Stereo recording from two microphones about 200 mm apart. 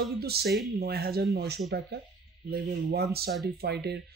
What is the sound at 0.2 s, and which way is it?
Speech, 55° right (ahead or behind).